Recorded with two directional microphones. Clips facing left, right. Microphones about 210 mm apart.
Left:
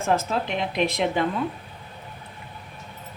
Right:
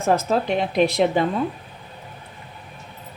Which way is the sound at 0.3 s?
40° right (ahead or behind).